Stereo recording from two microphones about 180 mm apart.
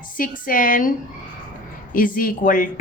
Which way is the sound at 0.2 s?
50° left (ahead or behind).